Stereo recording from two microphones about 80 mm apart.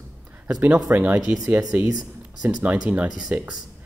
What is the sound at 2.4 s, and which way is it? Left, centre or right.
Speech, right.